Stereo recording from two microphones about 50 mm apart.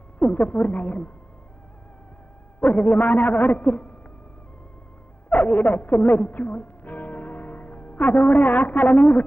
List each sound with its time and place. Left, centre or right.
0.2 s a man's voice: left
2.6 s a man's voice: left
5.3 s a woman's voice: left